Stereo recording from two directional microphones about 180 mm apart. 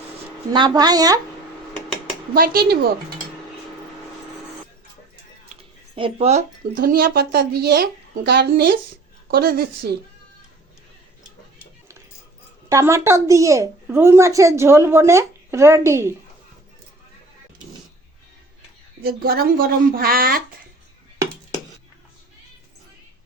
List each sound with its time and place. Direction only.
0.5 s speech: 25° right (ahead or behind)
2.3 s speech: 55° right (ahead or behind)
5.9 s speech: 35° right (ahead or behind)
6.7 s speech: 55° right (ahead or behind)
12.6 s a woman's voice: 15° right (ahead or behind)
19.0 s speech: 60° right (ahead or behind)